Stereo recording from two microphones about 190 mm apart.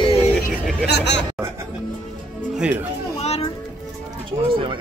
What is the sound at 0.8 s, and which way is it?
Chatter, 65° left (ahead or behind).